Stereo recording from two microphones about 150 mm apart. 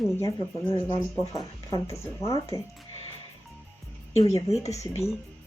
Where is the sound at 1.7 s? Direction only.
20° left (ahead or behind).